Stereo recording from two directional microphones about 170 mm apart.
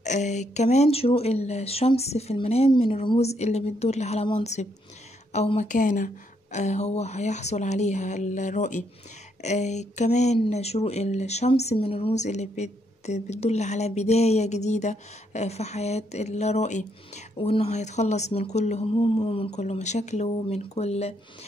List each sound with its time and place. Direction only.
0.0 s speech: 45° left (ahead or behind)